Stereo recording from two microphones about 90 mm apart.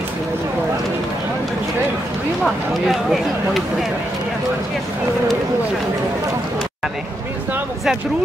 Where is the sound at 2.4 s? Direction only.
Centre (ahead or behind).